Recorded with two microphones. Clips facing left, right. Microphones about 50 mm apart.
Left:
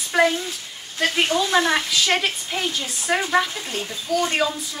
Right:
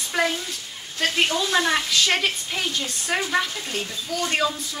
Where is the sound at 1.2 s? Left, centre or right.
Centre.